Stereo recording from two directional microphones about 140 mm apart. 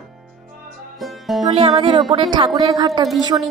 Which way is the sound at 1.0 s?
Centre (ahead or behind).